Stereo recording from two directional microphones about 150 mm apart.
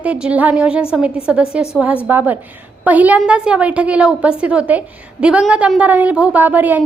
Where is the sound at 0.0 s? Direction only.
10° right (ahead or behind).